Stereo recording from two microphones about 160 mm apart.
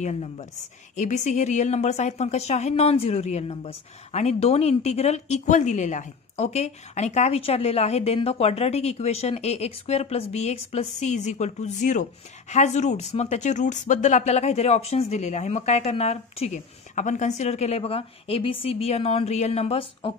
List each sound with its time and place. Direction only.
0.0 s a woman's voice: 45° left (ahead or behind)